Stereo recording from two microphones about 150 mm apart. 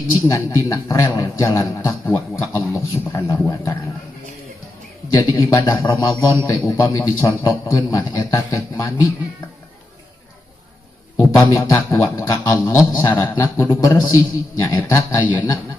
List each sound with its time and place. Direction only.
0.3 s speech: 20° left (ahead or behind)
5.1 s speech: 25° left (ahead or behind)
11.1 s speech: 20° left (ahead or behind)